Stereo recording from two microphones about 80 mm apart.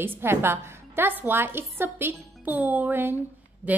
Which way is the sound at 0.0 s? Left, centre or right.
Right.